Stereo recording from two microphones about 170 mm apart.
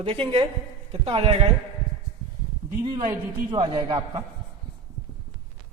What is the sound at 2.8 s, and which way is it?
A man's voice, 20° right (ahead or behind).